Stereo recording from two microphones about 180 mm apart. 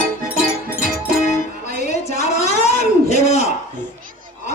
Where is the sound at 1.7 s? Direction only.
40° left (ahead or behind).